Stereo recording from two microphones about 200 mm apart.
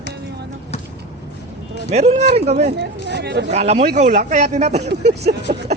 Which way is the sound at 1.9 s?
35° right (ahead or behind).